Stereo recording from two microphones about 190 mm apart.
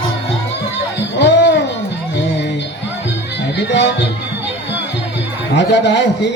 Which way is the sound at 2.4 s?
65° left (ahead or behind).